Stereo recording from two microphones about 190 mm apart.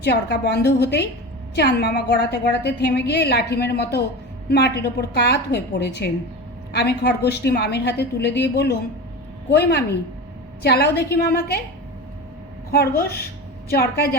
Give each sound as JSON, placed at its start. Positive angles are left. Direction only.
{"t": 0.0, "sound": "a woman's voice", "side_deg": 60}
{"t": 12.7, "sound": "a woman's voice", "side_deg": 55}